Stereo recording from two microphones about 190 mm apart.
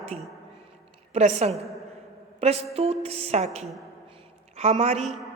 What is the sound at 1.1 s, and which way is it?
A woman's voice, 35° right (ahead or behind).